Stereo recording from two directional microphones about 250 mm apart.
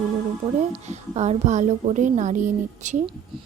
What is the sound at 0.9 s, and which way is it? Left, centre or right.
Speech, right.